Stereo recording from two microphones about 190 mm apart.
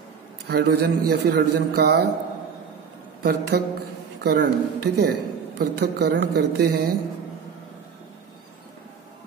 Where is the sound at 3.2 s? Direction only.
55° right (ahead or behind).